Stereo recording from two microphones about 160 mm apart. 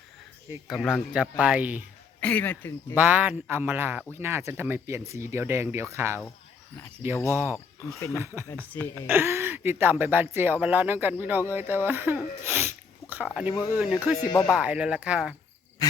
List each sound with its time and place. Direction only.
0.7 s speech: 5° left (ahead or behind)
1.1 s speech: 5° right (ahead or behind)
2.2 s speech: 10° left (ahead or behind)
2.9 s speech: 10° right (ahead or behind)
7.3 s speech: 15° right (ahead or behind)
7.9 s speech: 20° left (ahead or behind)
8.2 s speech: 15° right (ahead or behind)
8.4 s speech: 10° left (ahead or behind)
9.0 s speech: 15° right (ahead or behind)
15.8 s speech: 25° left (ahead or behind)